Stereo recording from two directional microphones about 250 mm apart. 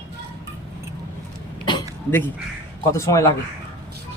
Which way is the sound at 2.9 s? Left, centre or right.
Centre.